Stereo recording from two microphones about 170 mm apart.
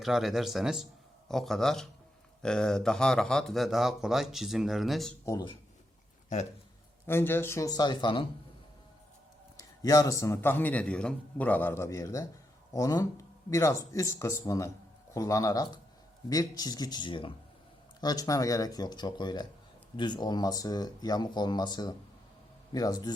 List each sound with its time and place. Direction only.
0.0 s speech: centre (ahead or behind)
5.2 s speech: 20° left (ahead or behind)
7.1 s speech: 15° left (ahead or behind); by 8.3 s 30° left (ahead or behind)
9.6 s a man's voice: 20° left (ahead or behind)